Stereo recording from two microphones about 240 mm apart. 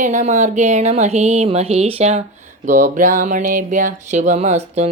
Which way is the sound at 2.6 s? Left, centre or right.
Right.